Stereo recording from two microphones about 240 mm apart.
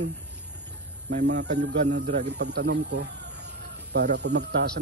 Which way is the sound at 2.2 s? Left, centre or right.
Right.